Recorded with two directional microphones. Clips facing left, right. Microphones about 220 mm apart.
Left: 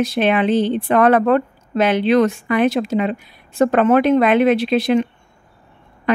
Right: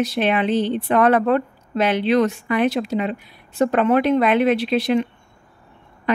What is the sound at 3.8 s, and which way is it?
Speech, 45° left (ahead or behind).